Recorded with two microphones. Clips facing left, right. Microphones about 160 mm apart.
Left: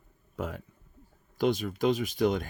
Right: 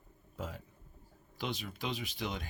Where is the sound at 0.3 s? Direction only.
60° left (ahead or behind).